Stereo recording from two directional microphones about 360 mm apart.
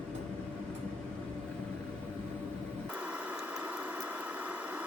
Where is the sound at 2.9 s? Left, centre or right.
Centre.